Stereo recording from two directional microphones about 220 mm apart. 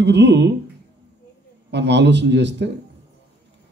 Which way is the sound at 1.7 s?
50° right (ahead or behind).